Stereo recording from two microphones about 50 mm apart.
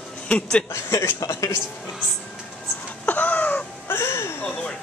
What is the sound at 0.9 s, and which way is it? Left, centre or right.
Speech, left.